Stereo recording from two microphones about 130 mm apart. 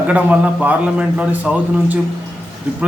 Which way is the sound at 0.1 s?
10° right (ahead or behind).